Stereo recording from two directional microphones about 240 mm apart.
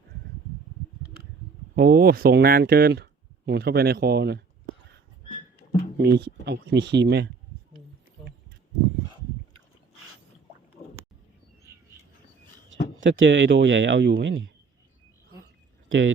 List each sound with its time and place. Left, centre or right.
1.7 s speech: right
6.0 s speech: right
13.1 s speech: right
15.9 s speech: right